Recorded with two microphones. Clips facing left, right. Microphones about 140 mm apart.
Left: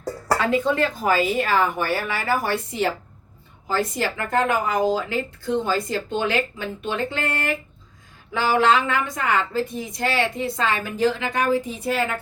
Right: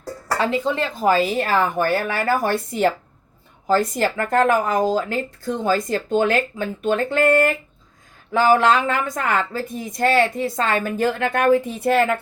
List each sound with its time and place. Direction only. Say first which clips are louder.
0.3 s speech: even; 25° right (ahead or behind)
1.4 s a woman's voice: right 2 dB; 40° right (ahead or behind); by 12.1 s 60° right (ahead or behind)